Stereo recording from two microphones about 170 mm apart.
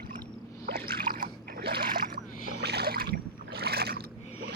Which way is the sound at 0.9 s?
60° right (ahead or behind).